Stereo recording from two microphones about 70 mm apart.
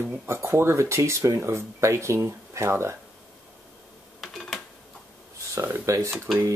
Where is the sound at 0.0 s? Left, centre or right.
Right.